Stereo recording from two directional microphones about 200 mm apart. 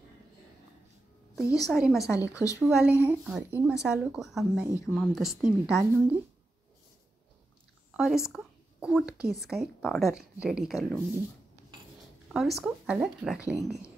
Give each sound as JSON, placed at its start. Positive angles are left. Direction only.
{"t": 1.7, "sound": "speech", "side_deg": 0}
{"t": 2.1, "sound": "speech", "side_deg": 15}
{"t": 2.6, "sound": "speech", "side_deg": -5}
{"t": 7.9, "sound": "a sound", "side_deg": 0}
{"t": 9.4, "sound": "speech", "side_deg": 0}
{"t": 12.3, "sound": "speech", "side_deg": 0}